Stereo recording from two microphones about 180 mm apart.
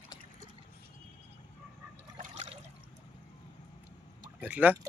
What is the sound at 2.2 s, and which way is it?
Water, 40° right (ahead or behind).